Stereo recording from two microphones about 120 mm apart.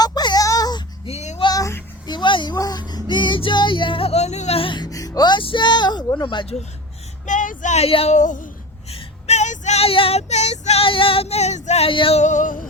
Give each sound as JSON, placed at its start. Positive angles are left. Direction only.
{"t": 0.0, "sound": "a sound", "side_deg": 35}
{"t": 1.0, "sound": "music", "side_deg": 65}
{"t": 1.4, "sound": "a sound", "side_deg": 35}
{"t": 2.9, "sound": "speech", "side_deg": 40}
{"t": 7.3, "sound": "speech", "side_deg": 90}
{"t": 7.9, "sound": "female singing", "side_deg": 50}
{"t": 8.1, "sound": "speech", "side_deg": 90}
{"t": 8.9, "sound": "child singing", "side_deg": 60}
{"t": 10.8, "sound": "female singing", "side_deg": 50}
{"t": 11.9, "sound": "female singing", "side_deg": 50}
{"t": 12.2, "sound": "speech", "side_deg": 90}